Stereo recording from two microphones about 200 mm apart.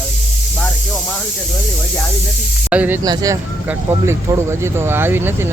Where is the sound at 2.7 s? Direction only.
5° right (ahead or behind).